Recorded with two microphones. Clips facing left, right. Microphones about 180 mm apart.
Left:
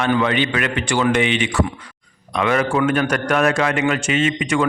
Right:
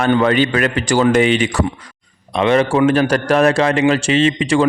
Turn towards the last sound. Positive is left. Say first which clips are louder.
# right 5 dB
turn(degrees=-30)  # may be behind; listen again after turning